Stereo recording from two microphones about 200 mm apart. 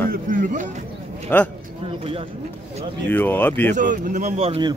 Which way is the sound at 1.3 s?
10° left (ahead or behind).